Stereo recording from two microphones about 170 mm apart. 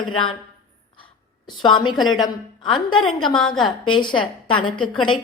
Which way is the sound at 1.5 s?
25° left (ahead or behind).